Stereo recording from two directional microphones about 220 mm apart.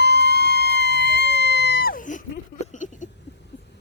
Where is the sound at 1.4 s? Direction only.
50° left (ahead or behind); by 3.1 s 35° left (ahead or behind).